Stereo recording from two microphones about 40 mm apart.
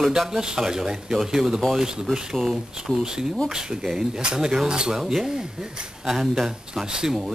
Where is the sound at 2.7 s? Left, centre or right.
Centre.